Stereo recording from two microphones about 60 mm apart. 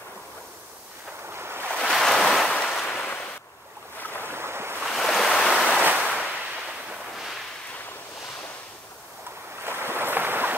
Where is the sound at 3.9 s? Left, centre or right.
Left.